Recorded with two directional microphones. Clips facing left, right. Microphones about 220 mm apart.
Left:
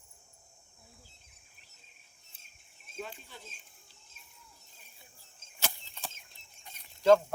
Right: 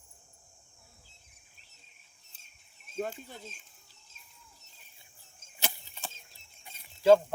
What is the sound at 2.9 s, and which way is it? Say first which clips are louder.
Speech: right 7 dB; 50° right (ahead or behind).